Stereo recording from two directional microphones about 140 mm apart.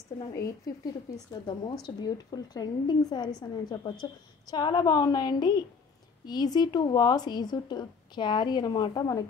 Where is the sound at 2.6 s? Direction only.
30° left (ahead or behind).